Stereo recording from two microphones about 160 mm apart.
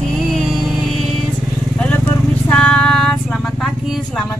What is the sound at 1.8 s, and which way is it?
Vehicle, 10° left (ahead or behind).